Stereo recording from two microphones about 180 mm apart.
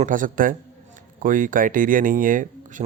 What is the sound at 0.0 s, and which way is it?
Speech, 50° right (ahead or behind).